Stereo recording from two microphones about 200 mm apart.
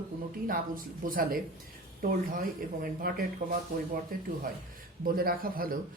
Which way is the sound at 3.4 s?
30° right (ahead or behind).